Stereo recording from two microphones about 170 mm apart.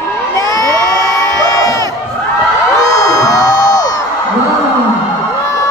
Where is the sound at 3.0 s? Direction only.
20° left (ahead or behind).